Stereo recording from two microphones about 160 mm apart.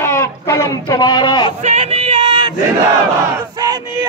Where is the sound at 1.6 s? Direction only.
45° right (ahead or behind).